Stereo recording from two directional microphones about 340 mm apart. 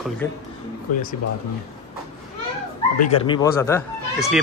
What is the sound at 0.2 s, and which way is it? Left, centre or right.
Speech, centre.